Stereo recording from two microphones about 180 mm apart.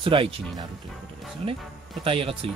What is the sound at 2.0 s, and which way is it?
Speech, 30° right (ahead or behind).